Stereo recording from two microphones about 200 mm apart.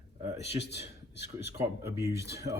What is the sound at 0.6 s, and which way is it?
Speech, 60° left (ahead or behind).